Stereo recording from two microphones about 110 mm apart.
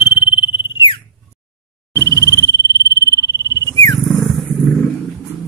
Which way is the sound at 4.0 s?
Centre (ahead or behind).